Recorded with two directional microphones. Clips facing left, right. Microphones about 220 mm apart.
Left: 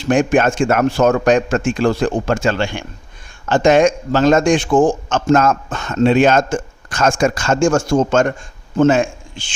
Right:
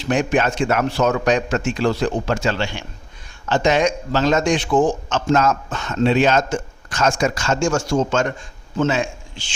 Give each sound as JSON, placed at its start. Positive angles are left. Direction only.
{"t": 0.0, "sound": "a man's voice", "side_deg": 50}